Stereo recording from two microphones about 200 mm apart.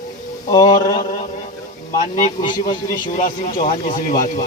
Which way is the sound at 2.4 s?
20° left (ahead or behind).